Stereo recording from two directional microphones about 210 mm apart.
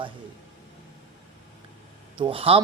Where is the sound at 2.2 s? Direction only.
25° right (ahead or behind).